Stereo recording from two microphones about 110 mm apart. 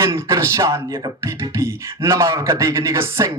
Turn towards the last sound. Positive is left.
turn(degrees=-30)  # may be behind; listen again after turning